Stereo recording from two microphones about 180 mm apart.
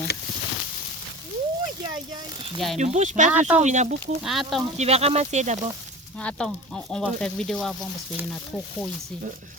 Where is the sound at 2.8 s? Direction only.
40° right (ahead or behind).